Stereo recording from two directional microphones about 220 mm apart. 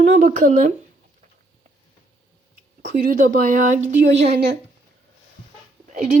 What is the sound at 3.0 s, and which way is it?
Speech, 35° right (ahead or behind).